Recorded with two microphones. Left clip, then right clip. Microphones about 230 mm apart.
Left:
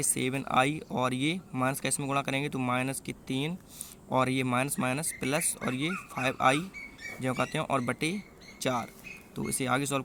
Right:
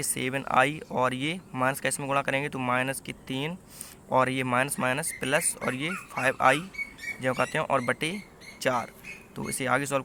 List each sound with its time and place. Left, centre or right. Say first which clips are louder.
0.0 s speech: right 1 dB; left